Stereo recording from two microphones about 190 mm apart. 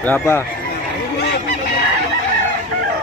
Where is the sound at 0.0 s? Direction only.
10° left (ahead or behind).